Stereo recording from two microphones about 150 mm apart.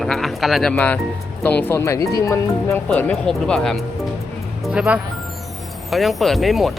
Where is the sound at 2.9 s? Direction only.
10° left (ahead or behind).